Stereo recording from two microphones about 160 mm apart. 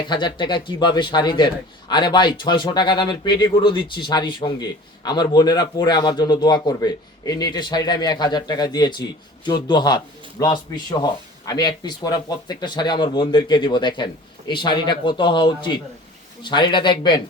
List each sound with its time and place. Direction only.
0.1 s speech: 30° left (ahead or behind)